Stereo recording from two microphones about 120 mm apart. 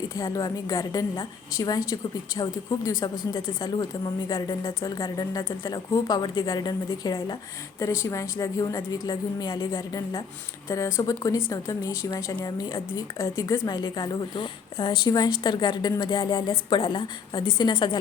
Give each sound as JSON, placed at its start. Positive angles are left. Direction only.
{"t": 0.2, "sound": "a woman's voice", "side_deg": 30}
{"t": 13.4, "sound": "a woman's voice", "side_deg": 30}
{"t": 14.3, "sound": "a woman's voice", "side_deg": 45}
{"t": 16.7, "sound": "a woman's voice", "side_deg": 45}